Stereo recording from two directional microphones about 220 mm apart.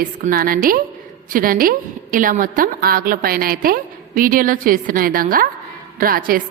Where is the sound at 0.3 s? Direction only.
40° right (ahead or behind).